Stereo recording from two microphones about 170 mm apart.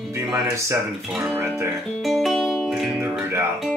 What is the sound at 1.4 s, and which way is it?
Speech, 15° right (ahead or behind).